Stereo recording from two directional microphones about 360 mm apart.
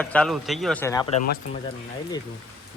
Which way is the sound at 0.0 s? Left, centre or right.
Centre.